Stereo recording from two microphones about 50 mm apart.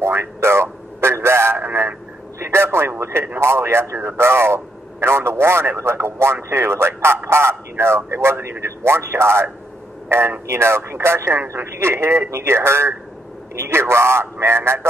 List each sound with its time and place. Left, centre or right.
0.0 s radio: right
1.6 s radio: right
2.4 s radio: right
3.3 s a man's voice: right